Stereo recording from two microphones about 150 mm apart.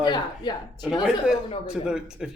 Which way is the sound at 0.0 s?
30° left (ahead or behind).